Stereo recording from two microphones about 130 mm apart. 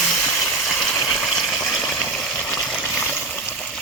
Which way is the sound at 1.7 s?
Centre (ahead or behind).